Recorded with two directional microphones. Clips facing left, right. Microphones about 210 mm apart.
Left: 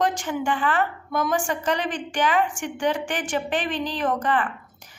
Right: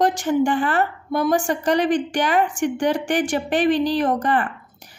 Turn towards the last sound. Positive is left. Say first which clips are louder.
# right 3 dB
turn(degrees=-40)  # may be behind; listen again after turning